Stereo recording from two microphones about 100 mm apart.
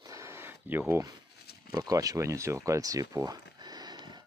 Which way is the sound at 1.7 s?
35° right (ahead or behind).